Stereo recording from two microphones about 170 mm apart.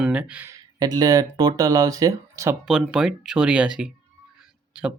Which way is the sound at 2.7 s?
5° right (ahead or behind).